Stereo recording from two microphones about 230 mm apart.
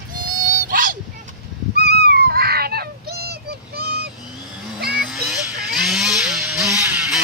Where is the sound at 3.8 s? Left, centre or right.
Right.